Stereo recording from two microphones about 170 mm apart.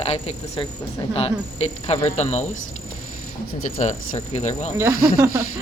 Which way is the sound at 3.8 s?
45° left (ahead or behind).